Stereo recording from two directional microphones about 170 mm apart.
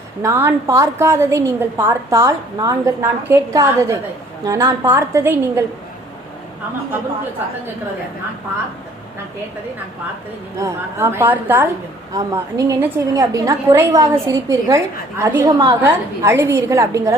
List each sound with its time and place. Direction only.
0.2 s a woman's voice: 15° right (ahead or behind)
10.6 s a woman's voice: 15° right (ahead or behind)